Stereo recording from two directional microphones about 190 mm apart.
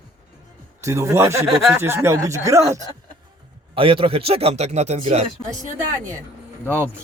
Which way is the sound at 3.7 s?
30° right (ahead or behind).